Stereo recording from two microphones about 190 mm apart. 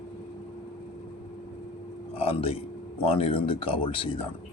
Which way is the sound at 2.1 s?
30° left (ahead or behind).